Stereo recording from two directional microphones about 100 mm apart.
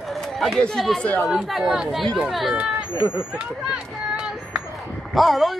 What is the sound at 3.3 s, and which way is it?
Speech, 5° right (ahead or behind).